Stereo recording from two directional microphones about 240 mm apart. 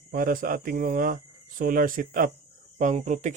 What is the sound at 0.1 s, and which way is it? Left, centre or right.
Speech, right.